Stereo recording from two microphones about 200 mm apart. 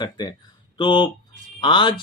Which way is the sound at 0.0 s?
20° left (ahead or behind).